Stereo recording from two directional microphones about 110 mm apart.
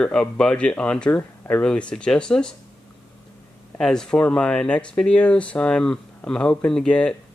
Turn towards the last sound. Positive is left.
turn(degrees=10)  # may be behind; listen again after turning